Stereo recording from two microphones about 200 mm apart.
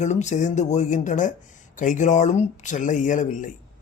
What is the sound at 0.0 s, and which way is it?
Speech, 35° left (ahead or behind).